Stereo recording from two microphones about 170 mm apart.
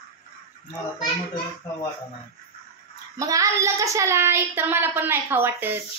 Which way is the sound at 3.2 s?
20° right (ahead or behind).